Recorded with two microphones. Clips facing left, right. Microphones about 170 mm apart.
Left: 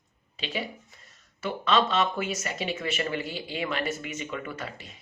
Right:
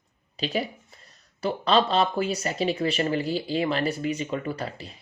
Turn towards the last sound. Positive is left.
turn(degrees=-35)  # may be behind; listen again after turning